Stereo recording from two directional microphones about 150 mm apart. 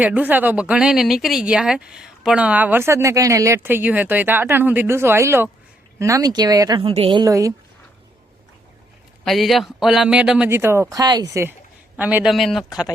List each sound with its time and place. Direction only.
0.0 s speech: 10° right (ahead or behind); by 7.3 s 35° right (ahead or behind)
7.3 s speech: 20° right (ahead or behind)
9.2 s speech: centre (ahead or behind)
10.5 s speech: 15° right (ahead or behind)
11.9 s speech: 10° right (ahead or behind)